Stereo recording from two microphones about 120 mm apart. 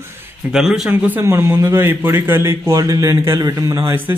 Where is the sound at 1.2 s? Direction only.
20° right (ahead or behind).